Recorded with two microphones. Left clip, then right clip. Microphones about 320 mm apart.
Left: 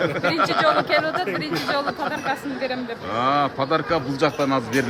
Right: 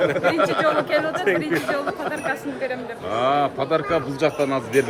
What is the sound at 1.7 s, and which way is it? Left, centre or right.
Speech, centre.